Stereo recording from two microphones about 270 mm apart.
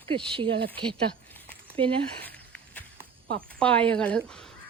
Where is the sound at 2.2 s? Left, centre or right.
Centre.